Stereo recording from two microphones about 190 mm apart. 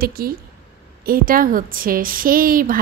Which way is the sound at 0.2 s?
50° right (ahead or behind).